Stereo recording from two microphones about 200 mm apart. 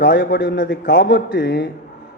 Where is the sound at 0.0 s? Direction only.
60° left (ahead or behind).